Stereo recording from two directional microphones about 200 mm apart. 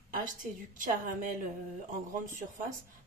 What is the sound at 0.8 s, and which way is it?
A woman's voice, 40° right (ahead or behind).